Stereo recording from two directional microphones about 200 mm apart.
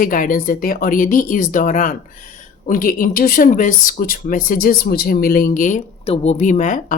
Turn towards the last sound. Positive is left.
turn(degrees=40)  # may be behind; listen again after turning